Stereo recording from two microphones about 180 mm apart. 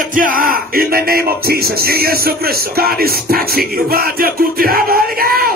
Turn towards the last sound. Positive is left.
turn(degrees=-55)  # may be behind; listen again after turning